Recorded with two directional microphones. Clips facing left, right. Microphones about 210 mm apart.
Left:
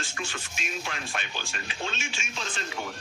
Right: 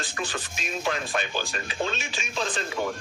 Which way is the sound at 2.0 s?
35° right (ahead or behind).